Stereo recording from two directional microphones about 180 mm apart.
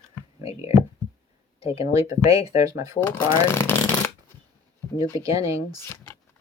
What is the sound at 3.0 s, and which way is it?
Speech, 15° left (ahead or behind).